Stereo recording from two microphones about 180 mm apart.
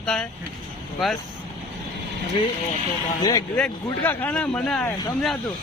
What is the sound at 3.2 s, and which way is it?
Speech, 20° left (ahead or behind).